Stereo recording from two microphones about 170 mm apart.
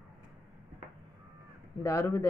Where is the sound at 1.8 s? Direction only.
15° left (ahead or behind).